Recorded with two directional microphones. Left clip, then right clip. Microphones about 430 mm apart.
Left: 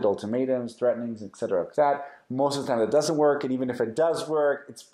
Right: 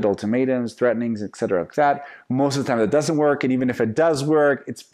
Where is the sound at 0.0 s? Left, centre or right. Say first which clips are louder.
Right 4 dB; right.